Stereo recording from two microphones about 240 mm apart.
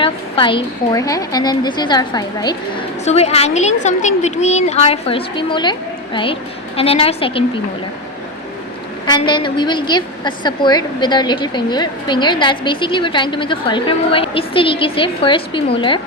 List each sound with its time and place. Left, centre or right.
0.0 s a woman's voice: left
3.0 s a woman's voice: left
6.7 s a woman's voice: left
9.0 s a woman's voice: centre